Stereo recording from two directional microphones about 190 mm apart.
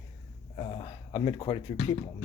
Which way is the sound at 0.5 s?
30° left (ahead or behind).